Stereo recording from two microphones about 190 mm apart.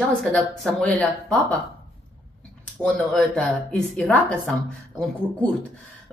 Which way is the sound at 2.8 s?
5° left (ahead or behind).